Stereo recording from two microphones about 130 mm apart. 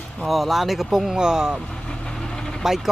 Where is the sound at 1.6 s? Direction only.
5° left (ahead or behind).